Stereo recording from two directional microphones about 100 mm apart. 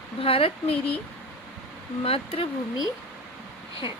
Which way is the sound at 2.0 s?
80° left.